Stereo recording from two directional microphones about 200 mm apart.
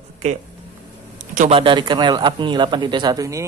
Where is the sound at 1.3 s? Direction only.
40° right (ahead or behind).